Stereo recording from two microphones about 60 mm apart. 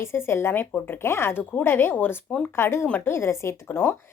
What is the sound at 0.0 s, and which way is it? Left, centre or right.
Speech, left.